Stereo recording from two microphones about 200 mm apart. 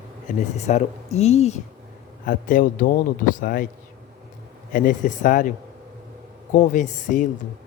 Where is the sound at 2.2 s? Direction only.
45° left (ahead or behind).